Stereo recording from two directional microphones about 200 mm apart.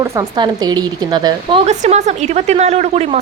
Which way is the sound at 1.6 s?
35° right (ahead or behind).